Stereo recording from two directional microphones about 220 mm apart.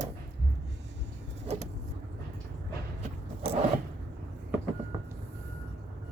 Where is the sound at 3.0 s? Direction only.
25° right (ahead or behind).